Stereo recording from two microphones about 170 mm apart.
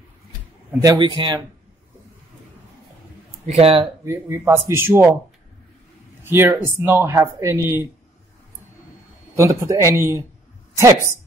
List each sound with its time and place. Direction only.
0.7 s speech: 25° right (ahead or behind)
3.4 s speech: 35° right (ahead or behind)
4.0 s speech: 15° right (ahead or behind)
6.2 s speech: 15° right (ahead or behind)
9.4 s speech: 15° right (ahead or behind)